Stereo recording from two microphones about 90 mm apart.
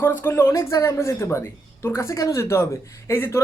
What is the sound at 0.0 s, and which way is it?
Speech, 30° left (ahead or behind).